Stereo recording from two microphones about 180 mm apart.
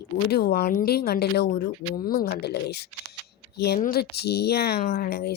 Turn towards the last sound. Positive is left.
turn(degrees=65)  # may be behind; listen again after turning